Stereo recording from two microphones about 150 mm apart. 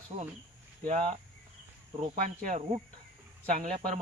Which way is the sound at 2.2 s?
60° right (ahead or behind).